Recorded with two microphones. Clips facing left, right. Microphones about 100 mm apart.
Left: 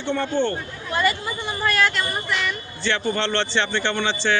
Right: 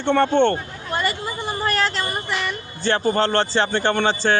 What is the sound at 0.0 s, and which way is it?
Speech, 65° right (ahead or behind).